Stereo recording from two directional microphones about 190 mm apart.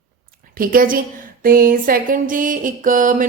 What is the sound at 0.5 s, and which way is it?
Speech, 50° right (ahead or behind).